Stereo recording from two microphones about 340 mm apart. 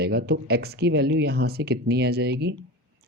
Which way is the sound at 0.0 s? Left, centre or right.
Right.